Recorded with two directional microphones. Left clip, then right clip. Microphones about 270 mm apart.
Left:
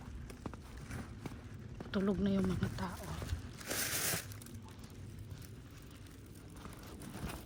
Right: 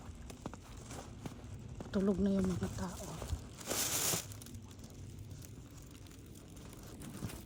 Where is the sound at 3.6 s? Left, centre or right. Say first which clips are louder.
Right 1 dB; centre.